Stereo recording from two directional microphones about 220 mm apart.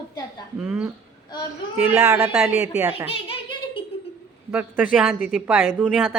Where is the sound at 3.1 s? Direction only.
25° left (ahead or behind).